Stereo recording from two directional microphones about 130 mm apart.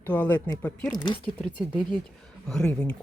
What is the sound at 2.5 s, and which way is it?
Speech, 5° left (ahead or behind).